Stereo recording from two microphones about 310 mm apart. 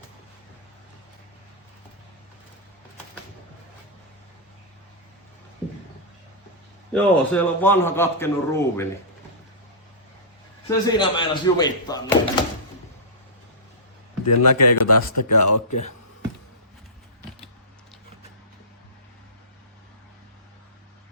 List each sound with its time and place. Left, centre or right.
6.9 s a man's voice: centre
10.7 s a man's voice: centre
14.3 s speech: left